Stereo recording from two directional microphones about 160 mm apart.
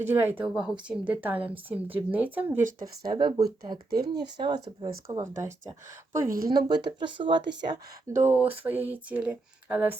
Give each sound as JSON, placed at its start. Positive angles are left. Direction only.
{"t": 0.0, "sound": "a woman's voice", "side_deg": -15}
{"t": 2.8, "sound": "speech", "side_deg": -30}
{"t": 5.0, "sound": "a woman's voice", "side_deg": -15}
{"t": 6.3, "sound": "speech", "side_deg": -65}
{"t": 6.6, "sound": "speech", "side_deg": -25}
{"t": 8.1, "sound": "a woman's voice", "side_deg": -15}